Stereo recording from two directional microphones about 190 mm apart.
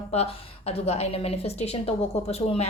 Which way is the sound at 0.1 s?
35° left (ahead or behind).